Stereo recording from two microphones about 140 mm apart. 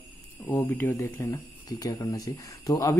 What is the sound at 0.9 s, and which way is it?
Speech, 20° left (ahead or behind).